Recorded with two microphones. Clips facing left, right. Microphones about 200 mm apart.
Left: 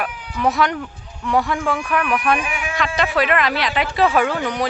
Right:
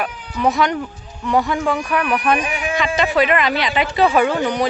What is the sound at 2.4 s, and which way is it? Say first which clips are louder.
Speech: right 3 dB; 35° right (ahead or behind).